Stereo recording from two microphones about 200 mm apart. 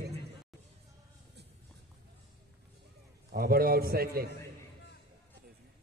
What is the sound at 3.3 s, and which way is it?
A man's voice, 50° right (ahead or behind).